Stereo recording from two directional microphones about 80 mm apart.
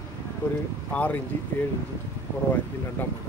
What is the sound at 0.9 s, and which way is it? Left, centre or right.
Speech, centre.